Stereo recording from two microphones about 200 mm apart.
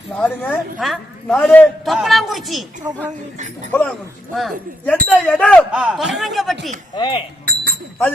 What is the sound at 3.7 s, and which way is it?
Speech, 10° left (ahead or behind).